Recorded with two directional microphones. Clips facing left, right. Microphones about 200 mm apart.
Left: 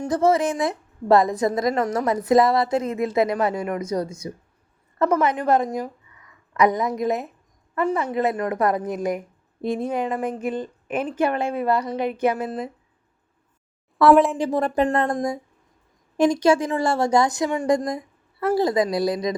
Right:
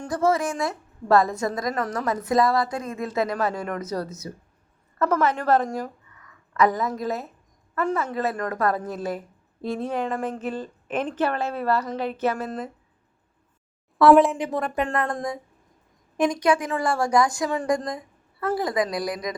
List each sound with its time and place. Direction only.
0.1 s a woman's voice: 20° left (ahead or behind)
14.0 s a woman's voice: centre (ahead or behind)
14.3 s a woman's voice: 30° left (ahead or behind); by 17.8 s 15° left (ahead or behind)
17.8 s a woman's voice: 25° left (ahead or behind)